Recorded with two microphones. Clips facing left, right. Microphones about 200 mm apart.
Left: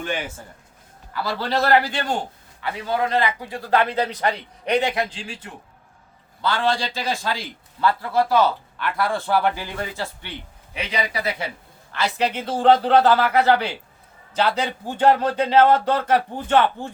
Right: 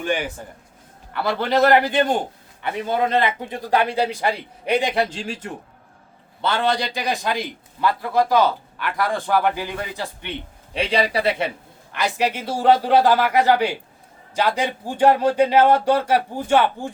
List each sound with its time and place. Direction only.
1.2 s a man's voice: 20° right (ahead or behind)
4.9 s a man's voice: 45° right (ahead or behind)
6.4 s a man's voice: 20° right (ahead or behind)
10.8 s a man's voice: 30° right (ahead or behind); by 16.9 s 10° right (ahead or behind)